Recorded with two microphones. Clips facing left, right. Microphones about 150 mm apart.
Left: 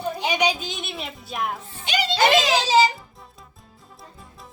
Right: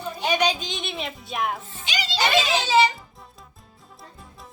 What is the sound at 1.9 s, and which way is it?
Music, 55° left (ahead or behind).